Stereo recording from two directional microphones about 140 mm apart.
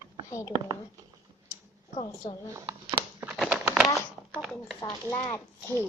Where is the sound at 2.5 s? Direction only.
25° right (ahead or behind).